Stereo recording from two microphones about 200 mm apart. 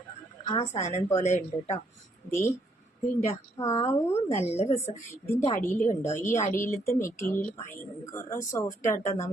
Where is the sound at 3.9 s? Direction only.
35° left (ahead or behind).